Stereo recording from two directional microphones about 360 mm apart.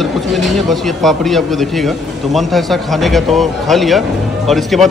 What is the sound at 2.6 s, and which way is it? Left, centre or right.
A man's voice, centre.